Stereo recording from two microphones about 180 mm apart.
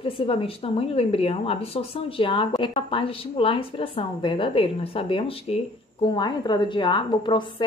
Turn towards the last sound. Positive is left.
turn(degrees=25)  # may be behind; listen again after turning